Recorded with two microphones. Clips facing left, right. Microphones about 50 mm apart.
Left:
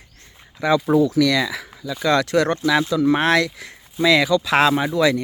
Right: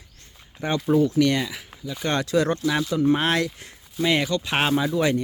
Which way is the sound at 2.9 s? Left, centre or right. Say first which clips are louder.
Left 2 dB; left.